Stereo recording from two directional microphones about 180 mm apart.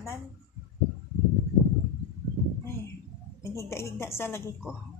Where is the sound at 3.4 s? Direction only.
15° left (ahead or behind).